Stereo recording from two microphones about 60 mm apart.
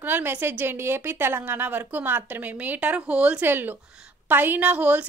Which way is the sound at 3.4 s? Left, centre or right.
Right.